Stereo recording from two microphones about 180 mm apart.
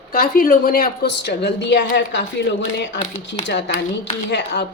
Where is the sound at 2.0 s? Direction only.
80° left.